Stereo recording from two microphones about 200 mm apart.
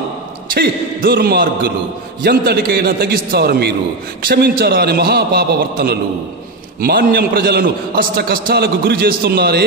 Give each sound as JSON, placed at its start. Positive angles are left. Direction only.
{"t": 0.6, "sound": "a man's voice", "side_deg": -55}